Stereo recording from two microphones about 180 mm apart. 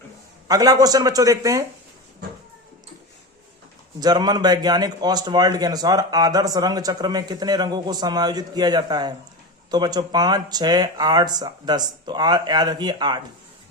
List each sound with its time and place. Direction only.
0.4 s a man's voice: 20° right (ahead or behind)
4.0 s a man's voice: 20° right (ahead or behind)